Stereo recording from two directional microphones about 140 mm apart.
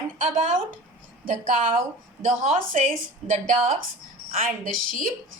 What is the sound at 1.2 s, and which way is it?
A woman's voice, 65° right (ahead or behind).